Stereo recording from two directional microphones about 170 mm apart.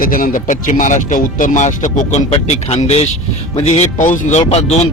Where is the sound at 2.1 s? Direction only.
40° left (ahead or behind).